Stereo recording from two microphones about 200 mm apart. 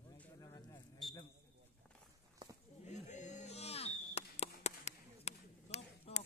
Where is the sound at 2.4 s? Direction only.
20° right (ahead or behind).